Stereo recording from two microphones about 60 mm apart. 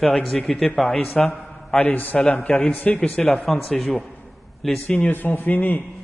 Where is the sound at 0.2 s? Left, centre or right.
Centre.